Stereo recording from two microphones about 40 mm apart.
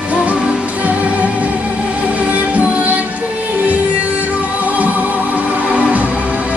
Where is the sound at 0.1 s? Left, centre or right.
Right.